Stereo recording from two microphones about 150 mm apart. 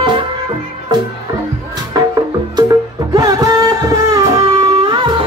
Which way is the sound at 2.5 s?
25° right (ahead or behind).